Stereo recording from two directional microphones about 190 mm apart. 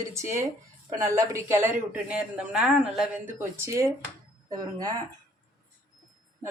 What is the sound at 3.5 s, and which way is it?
A woman's voice, 15° right (ahead or behind).